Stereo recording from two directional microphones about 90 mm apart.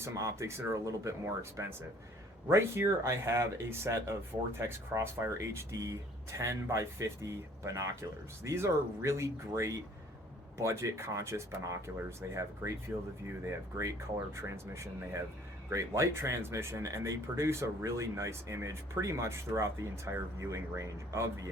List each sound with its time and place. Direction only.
0.1 s speech: 35° right (ahead or behind)
14.3 s speech: 30° right (ahead or behind)